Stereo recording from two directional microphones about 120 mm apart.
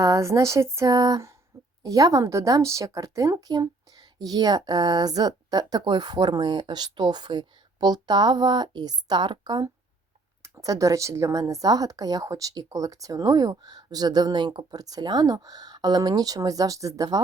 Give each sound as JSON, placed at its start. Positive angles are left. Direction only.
{"t": 0.0, "sound": "speech", "side_deg": -25}